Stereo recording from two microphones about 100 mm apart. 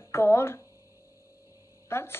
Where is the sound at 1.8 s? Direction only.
25° left (ahead or behind).